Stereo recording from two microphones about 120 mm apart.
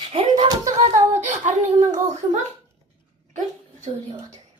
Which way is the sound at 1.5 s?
85° right.